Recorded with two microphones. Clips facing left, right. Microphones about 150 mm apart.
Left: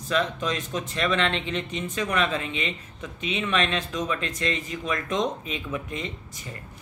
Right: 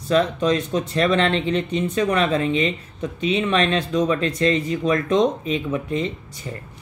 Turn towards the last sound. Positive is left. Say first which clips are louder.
# right 8 dB
turn(degrees=-30)  # may be behind; listen again after turning